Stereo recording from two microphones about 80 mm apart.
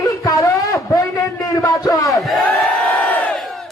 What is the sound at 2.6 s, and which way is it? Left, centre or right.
Crowd, left.